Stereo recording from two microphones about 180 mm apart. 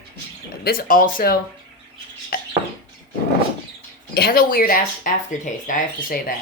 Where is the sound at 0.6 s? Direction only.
55° left (ahead or behind).